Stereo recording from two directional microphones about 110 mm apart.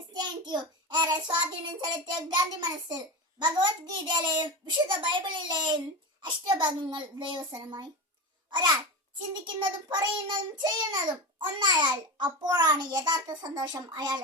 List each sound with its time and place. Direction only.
0.1 s child singing: 40° right (ahead or behind)
1.8 s a child's voice: 40° right (ahead or behind)